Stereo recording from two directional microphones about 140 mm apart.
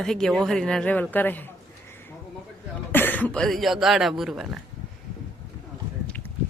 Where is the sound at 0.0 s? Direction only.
Centre (ahead or behind).